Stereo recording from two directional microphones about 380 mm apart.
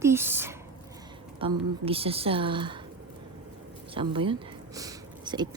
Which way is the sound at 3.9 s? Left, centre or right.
Centre.